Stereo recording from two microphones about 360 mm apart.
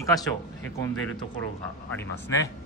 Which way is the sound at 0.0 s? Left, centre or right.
Centre.